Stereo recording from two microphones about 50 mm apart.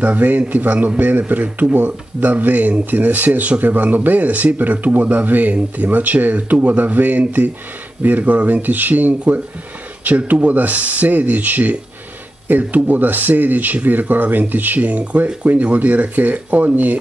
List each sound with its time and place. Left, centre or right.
0.0 s speech: right